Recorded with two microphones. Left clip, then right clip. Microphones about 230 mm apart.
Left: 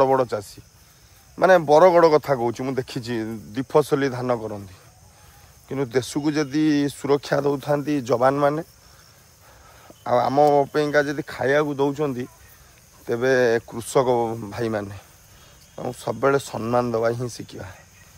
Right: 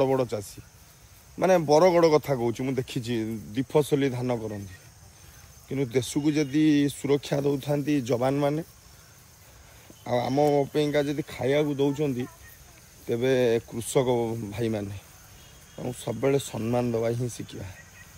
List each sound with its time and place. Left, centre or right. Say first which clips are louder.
0.0 s speech: left 6 dB; centre
5.7 s speech: left 4 dB; left
10.0 s speech: left 7 dB; left